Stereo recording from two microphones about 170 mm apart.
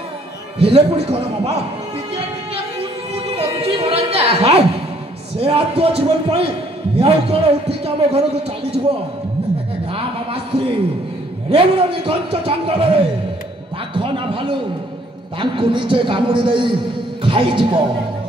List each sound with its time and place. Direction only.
0.6 s a man's voice: 35° right (ahead or behind)
2.1 s music: 35° right (ahead or behind)
3.3 s a sound: 35° right (ahead or behind)
5.4 s a man's voice: 35° right (ahead or behind)
11.5 s a man's voice: 30° right (ahead or behind)
13.9 s a man's voice: 30° right (ahead or behind)